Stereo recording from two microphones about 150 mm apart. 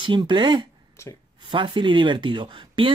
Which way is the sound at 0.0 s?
35° right (ahead or behind).